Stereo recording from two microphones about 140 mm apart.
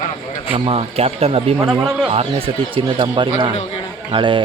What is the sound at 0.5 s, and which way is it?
Speech, 45° right (ahead or behind).